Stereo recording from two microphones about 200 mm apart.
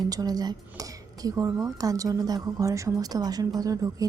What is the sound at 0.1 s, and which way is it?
A woman's voice, 20° right (ahead or behind).